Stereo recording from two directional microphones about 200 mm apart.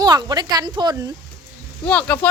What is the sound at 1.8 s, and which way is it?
Speech, 10° left (ahead or behind).